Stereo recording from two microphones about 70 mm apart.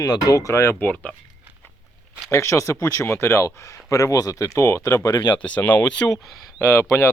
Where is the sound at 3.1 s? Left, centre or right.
Left.